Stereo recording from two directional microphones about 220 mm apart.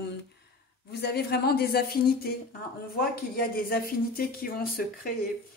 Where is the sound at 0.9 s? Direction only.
45° left (ahead or behind).